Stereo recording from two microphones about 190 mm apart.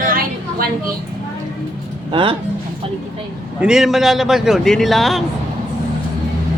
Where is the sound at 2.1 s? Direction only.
25° right (ahead or behind).